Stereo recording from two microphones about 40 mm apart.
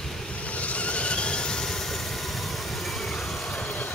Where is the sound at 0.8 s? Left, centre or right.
Left.